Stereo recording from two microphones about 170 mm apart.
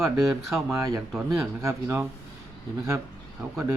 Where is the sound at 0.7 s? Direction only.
20° right (ahead or behind).